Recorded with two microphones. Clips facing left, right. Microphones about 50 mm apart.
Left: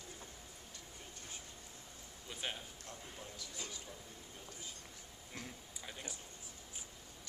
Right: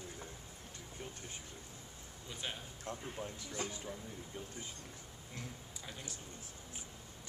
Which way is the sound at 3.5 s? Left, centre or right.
Right.